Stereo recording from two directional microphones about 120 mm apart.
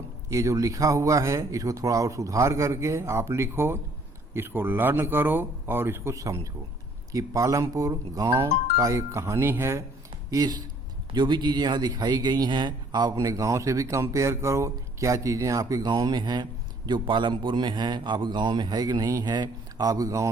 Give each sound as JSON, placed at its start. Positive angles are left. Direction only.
{"t": 0.3, "sound": "a man's voice", "side_deg": -25}
{"t": 10.3, "sound": "speech", "side_deg": -35}